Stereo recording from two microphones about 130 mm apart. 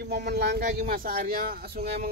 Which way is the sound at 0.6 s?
90° right.